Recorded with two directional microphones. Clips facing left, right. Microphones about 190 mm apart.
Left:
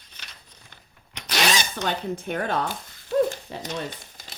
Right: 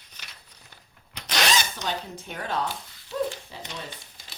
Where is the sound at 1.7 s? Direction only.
55° left (ahead or behind).